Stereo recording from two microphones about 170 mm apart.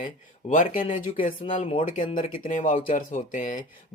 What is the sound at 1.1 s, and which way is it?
Speech, 35° left (ahead or behind).